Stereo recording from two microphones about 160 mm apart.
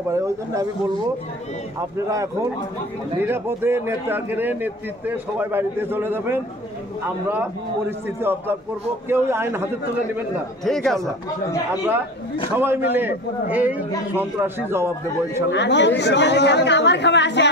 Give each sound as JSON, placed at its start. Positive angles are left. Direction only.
{"t": 1.8, "sound": "a man's voice", "side_deg": -20}
{"t": 8.2, "sound": "a man's voice", "side_deg": -15}
{"t": 10.6, "sound": "speech", "side_deg": 5}
{"t": 12.5, "sound": "a man's voice", "side_deg": -10}
{"t": 15.5, "sound": "speech", "side_deg": 90}